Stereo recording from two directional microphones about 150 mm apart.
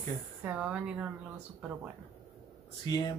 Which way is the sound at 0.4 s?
10° right (ahead or behind).